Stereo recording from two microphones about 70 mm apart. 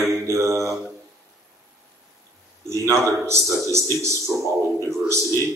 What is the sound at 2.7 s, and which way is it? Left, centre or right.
Speech, right.